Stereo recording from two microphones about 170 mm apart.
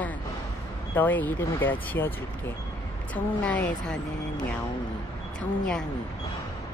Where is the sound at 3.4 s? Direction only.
10° left (ahead or behind).